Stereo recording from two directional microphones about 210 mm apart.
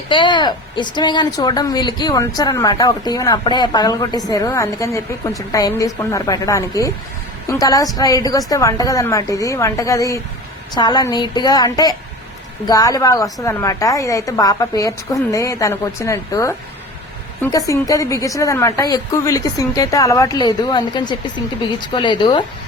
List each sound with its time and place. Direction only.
0.1 s a woman's voice: 20° left (ahead or behind)
17.7 s a woman's voice: 15° left (ahead or behind)